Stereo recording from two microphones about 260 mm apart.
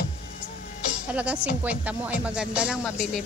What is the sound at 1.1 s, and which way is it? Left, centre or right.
Speech, centre.